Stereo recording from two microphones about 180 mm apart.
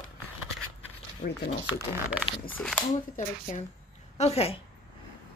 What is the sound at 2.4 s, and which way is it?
Speech, 10° left (ahead or behind).